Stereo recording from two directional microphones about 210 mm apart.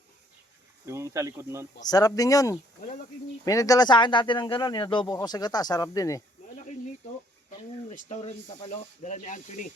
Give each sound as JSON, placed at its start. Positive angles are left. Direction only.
{"t": 0.9, "sound": "speech", "side_deg": -15}
{"t": 1.8, "sound": "speech", "side_deg": 20}
{"t": 7.9, "sound": "speech", "side_deg": 30}